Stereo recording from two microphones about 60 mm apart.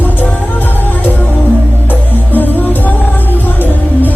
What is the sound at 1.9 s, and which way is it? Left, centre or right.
Music, left.